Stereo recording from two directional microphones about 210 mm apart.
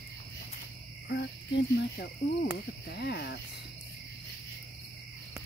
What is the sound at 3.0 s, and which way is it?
Speech, 50° left (ahead or behind).